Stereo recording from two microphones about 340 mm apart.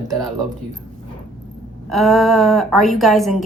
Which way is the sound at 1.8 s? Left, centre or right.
Centre.